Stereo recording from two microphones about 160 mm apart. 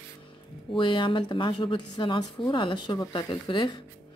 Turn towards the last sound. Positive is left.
turn(degrees=30)  # may be behind; listen again after turning